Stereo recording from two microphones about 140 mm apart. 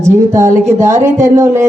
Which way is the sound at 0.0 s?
20° right (ahead or behind).